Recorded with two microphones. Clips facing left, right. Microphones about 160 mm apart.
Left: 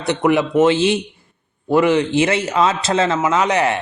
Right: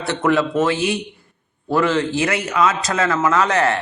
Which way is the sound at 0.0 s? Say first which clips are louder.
Left 2 dB; 15° left (ahead or behind).